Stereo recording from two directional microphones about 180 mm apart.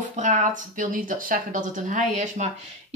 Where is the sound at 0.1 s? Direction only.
40° right (ahead or behind).